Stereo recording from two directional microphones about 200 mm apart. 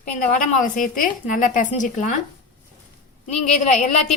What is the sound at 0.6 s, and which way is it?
A woman's voice, 40° left (ahead or behind).